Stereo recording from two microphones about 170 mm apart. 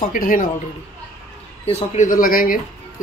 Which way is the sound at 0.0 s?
55° left (ahead or behind).